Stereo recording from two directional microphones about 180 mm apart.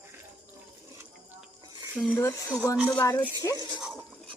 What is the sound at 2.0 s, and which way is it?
Speech, 10° left (ahead or behind).